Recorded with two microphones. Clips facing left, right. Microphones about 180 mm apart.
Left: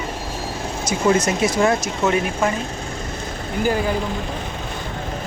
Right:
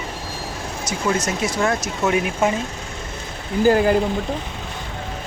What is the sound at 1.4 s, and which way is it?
Speech, 10° left (ahead or behind).